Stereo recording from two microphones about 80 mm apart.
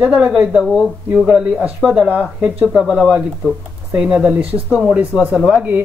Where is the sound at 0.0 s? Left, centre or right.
Centre.